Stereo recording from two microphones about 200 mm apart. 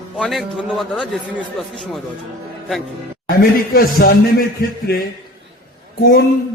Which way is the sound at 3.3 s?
50° left (ahead or behind).